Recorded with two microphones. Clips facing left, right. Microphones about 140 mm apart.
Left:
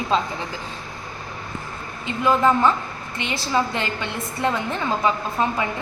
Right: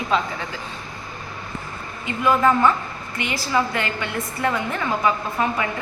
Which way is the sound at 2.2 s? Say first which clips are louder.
Even; 20° left (ahead or behind).